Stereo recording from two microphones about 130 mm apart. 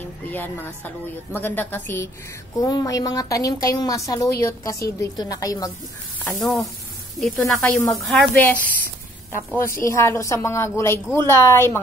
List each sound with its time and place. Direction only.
0.3 s a woman's voice: 15° left (ahead or behind)
2.6 s a woman's voice: 30° left (ahead or behind)
6.2 s a woman's voice: centre (ahead or behind); by 11.8 s 20° left (ahead or behind)